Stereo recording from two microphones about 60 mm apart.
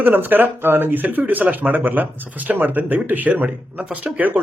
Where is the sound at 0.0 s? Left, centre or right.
Right.